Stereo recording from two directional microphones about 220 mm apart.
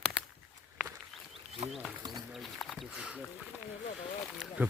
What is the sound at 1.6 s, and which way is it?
Speech, 30° right (ahead or behind).